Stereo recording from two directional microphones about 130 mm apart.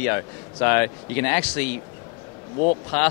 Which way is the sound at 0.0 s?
20° left (ahead or behind).